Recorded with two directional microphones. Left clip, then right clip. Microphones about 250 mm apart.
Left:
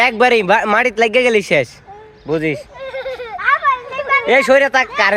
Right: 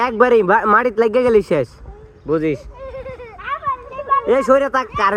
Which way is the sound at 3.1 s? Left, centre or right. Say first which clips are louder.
Left 12 dB; centre.